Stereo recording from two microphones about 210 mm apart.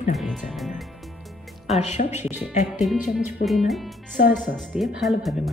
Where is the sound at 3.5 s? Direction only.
Centre (ahead or behind).